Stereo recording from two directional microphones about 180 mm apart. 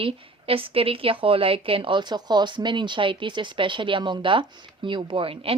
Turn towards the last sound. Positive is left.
turn(degrees=-30)  # may be behind; listen again after turning